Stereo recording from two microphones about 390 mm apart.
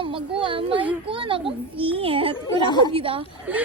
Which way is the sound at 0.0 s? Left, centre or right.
Centre.